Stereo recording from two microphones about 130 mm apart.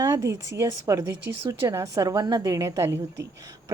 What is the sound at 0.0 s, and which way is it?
A woman's voice, 25° right (ahead or behind).